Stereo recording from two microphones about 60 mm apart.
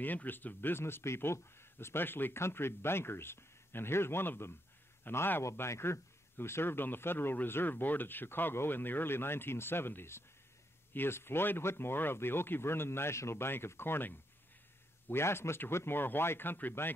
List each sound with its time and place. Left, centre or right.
0.0 s speech: left
5.4 s speech: left